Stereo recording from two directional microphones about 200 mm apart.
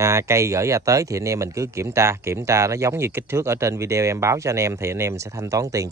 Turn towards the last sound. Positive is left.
turn(degrees=-15)  # may be behind; listen again after turning